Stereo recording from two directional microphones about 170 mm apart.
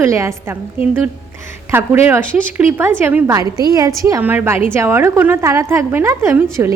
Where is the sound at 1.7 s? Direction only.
10° right (ahead or behind).